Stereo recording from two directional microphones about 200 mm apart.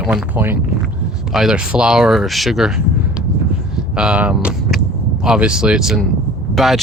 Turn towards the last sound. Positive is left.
turn(degrees=0)  # may be behind; listen again after turning